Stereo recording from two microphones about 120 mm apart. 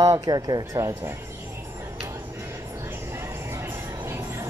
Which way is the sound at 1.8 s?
20° right (ahead or behind).